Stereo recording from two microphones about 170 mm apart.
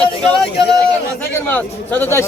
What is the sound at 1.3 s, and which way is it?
Speech, 10° left (ahead or behind).